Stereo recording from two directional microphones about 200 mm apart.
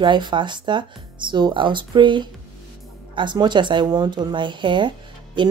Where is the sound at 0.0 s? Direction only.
25° right (ahead or behind).